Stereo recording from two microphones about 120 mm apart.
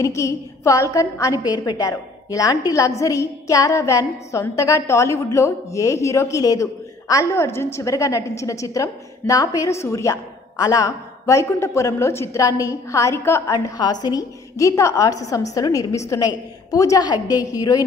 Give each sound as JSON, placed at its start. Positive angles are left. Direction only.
{"t": 0.0, "sound": "a woman's voice", "side_deg": 25}